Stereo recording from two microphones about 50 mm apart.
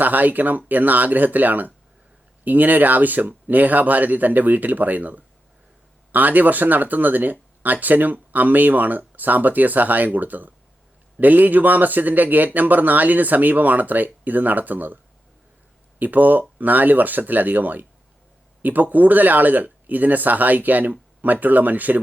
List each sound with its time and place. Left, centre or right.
0.0 s speech: right
16.0 s speech: right